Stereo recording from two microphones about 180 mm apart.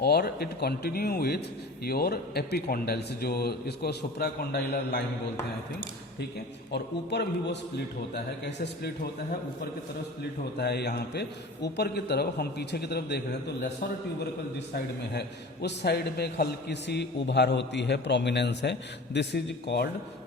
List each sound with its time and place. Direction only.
0.0 s speech: 60° left (ahead or behind)
6.7 s a man's voice: 65° left (ahead or behind)
10.6 s speech: 65° left (ahead or behind)
15.6 s a man's voice: 65° left (ahead or behind)